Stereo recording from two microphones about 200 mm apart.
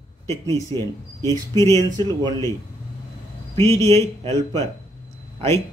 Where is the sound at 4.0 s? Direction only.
30° right (ahead or behind).